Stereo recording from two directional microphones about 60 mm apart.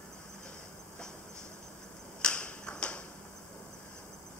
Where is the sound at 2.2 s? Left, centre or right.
Centre.